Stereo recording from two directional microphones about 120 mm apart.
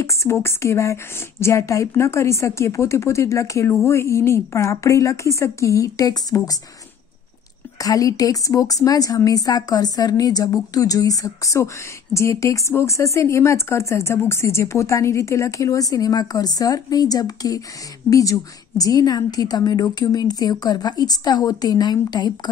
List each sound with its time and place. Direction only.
0.0 s a woman's voice: 25° left (ahead or behind)
7.8 s a woman's voice: 30° left (ahead or behind)